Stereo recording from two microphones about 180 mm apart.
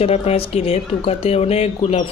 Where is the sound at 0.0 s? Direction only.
35° left (ahead or behind).